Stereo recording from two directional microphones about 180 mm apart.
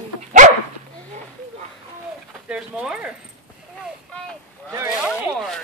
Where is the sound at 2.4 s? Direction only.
5° right (ahead or behind).